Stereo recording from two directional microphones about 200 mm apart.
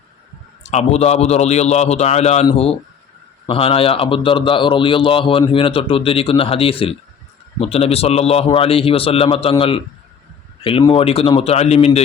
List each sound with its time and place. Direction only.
0.6 s a man's voice: 35° left (ahead or behind)